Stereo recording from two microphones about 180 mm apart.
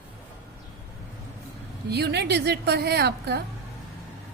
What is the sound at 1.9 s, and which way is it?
A woman's voice, 65° right (ahead or behind).